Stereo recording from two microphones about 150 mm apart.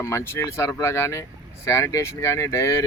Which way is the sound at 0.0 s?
20° left (ahead or behind).